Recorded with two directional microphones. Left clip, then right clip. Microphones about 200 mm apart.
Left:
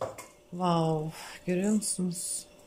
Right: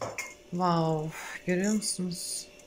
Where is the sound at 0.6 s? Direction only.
10° left (ahead or behind).